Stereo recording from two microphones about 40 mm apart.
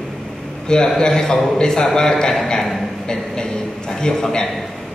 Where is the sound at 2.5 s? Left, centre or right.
Centre.